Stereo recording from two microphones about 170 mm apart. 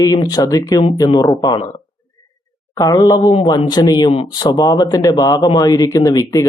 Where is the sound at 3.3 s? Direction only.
30° left (ahead or behind).